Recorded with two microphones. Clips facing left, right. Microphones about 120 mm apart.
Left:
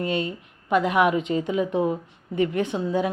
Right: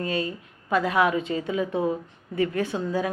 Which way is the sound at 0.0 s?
25° left (ahead or behind).